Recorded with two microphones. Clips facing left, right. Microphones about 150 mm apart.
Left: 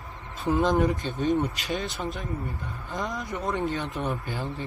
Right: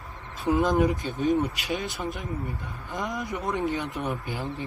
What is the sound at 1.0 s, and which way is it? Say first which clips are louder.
Speech: right 1 dB; 20° left (ahead or behind).